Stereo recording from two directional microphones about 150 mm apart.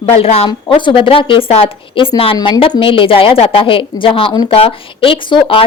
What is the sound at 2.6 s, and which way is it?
Speech, 35° left (ahead or behind).